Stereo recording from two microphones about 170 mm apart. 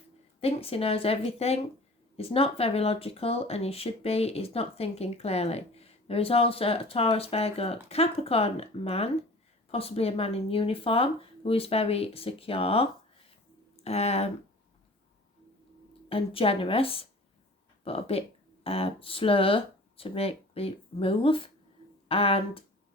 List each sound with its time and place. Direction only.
0.3 s speech: 35° left (ahead or behind)
16.0 s speech: 35° left (ahead or behind)